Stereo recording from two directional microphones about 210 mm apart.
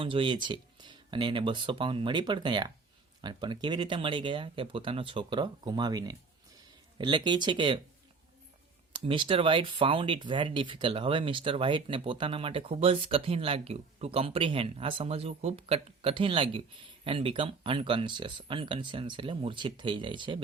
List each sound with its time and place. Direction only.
0.0 s speech: 25° right (ahead or behind)
9.0 s speech: 25° right (ahead or behind)